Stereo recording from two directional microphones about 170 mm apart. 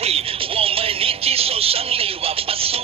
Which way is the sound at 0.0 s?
35° right (ahead or behind).